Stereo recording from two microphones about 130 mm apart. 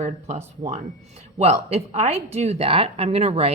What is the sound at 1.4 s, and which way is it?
A woman's voice, 55° right (ahead or behind).